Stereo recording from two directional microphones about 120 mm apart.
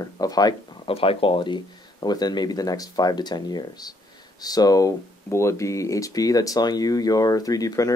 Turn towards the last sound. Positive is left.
turn(degrees=30)  # may be behind; listen again after turning